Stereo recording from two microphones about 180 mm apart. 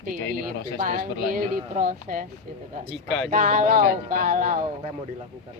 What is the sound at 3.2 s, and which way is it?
Speech, 45° right (ahead or behind).